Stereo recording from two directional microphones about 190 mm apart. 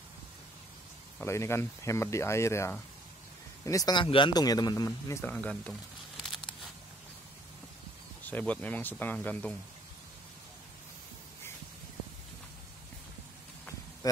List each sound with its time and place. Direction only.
1.2 s speech: 15° left (ahead or behind)
8.3 s speech: 10° left (ahead or behind)